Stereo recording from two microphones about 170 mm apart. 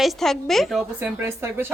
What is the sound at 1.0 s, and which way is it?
Speech, 15° right (ahead or behind).